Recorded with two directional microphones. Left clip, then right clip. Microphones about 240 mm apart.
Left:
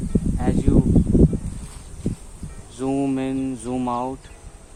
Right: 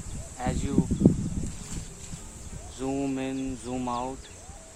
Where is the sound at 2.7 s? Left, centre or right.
Left.